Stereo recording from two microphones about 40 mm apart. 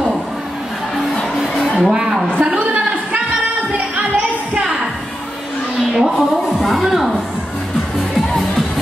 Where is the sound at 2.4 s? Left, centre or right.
Right.